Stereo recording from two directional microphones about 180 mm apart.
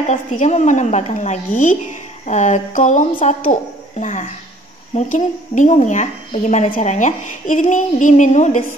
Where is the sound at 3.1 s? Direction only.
30° left (ahead or behind).